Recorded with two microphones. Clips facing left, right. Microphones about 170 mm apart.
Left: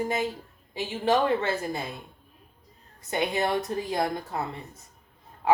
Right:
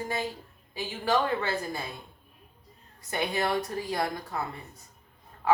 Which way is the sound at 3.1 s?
20° left (ahead or behind).